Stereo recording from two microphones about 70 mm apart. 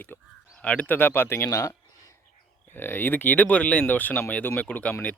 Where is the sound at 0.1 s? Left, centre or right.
Left.